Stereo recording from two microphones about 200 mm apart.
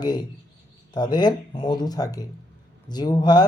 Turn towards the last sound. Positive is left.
turn(degrees=20)  # may be behind; listen again after turning